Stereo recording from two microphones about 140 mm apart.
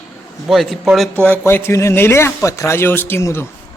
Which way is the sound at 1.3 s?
15° left (ahead or behind).